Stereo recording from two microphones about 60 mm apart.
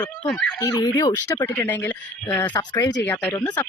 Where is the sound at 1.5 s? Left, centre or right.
Left.